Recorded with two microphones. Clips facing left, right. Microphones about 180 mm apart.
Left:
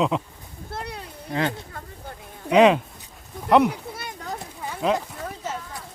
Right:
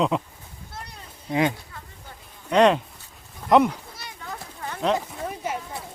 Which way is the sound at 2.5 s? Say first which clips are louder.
Left 2 dB; 5° left (ahead or behind).